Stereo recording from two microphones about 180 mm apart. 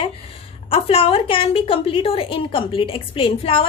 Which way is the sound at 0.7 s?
30° left (ahead or behind).